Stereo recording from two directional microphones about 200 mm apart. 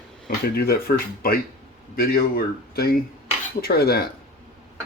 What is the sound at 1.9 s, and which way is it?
Speech, 50° left (ahead or behind).